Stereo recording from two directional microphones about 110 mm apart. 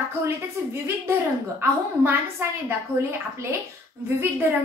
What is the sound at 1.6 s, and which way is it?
A woman's voice, 25° right (ahead or behind).